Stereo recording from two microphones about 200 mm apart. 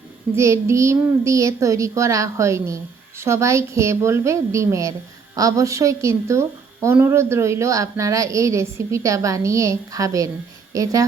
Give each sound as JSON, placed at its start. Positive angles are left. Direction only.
{"t": 0.3, "sound": "a woman's voice", "side_deg": -15}